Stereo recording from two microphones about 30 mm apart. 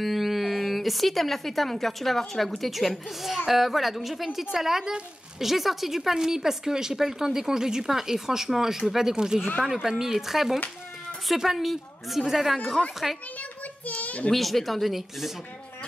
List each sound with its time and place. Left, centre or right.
0.0 s a child's voice: centre
12.8 s a child's voice: centre
13.4 s a sound: left
14.3 s a child's voice: centre